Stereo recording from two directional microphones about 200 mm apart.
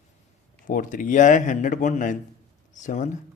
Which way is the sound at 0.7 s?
40° left (ahead or behind).